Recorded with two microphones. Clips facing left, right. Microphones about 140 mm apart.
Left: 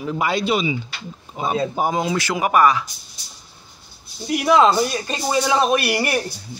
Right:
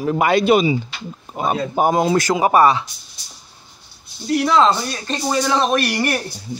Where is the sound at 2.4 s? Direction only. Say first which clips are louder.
Right 1 dB; 30° right (ahead or behind).